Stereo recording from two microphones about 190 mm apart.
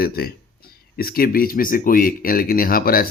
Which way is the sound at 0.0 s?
55° left (ahead or behind).